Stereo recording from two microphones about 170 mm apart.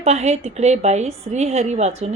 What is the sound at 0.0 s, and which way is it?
A woman's voice, 40° right (ahead or behind).